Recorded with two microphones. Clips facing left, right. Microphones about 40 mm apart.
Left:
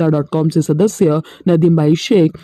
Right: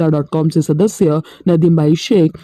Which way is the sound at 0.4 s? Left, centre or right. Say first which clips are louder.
Even; left.